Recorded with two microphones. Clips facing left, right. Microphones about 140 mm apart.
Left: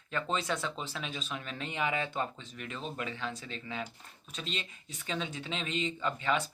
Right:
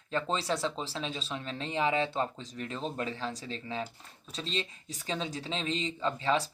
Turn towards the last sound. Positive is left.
turn(degrees=-30)  # may be behind; listen again after turning